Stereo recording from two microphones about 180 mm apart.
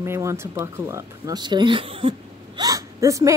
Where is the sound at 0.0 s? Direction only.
15° right (ahead or behind).